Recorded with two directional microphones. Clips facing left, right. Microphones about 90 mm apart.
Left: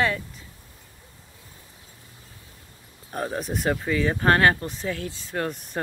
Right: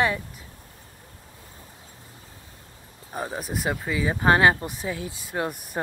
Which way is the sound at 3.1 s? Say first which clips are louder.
Left 2 dB; 5° right (ahead or behind).